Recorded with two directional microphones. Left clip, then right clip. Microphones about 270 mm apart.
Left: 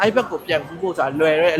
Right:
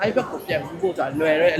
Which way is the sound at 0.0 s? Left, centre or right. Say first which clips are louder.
Left 4 dB; left.